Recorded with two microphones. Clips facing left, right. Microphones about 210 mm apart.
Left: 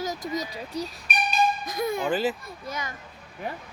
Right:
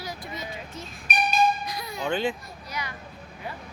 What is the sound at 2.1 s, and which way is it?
Speech, 5° left (ahead or behind).